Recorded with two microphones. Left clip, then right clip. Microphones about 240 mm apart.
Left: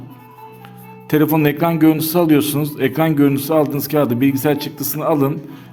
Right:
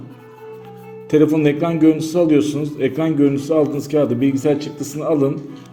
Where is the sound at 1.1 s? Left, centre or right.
Left.